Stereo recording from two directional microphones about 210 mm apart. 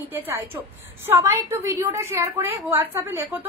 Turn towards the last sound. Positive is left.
turn(degrees=-10)  # may be behind; listen again after turning